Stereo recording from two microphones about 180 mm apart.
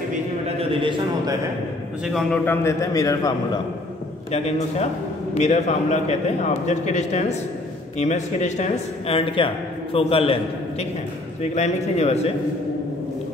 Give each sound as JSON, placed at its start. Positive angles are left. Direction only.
{"t": 0.6, "sound": "a man's voice", "side_deg": -30}
{"t": 2.1, "sound": "a man's voice", "side_deg": 10}
{"t": 4.3, "sound": "a man's voice", "side_deg": 35}